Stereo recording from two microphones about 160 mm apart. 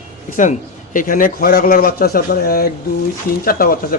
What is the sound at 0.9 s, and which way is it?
A man's voice, 60° left (ahead or behind).